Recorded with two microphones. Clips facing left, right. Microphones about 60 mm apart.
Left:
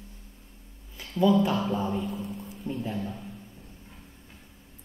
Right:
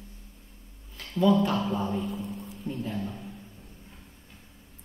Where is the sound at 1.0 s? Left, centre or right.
Centre.